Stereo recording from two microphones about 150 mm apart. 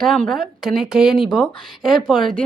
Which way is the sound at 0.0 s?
Centre (ahead or behind).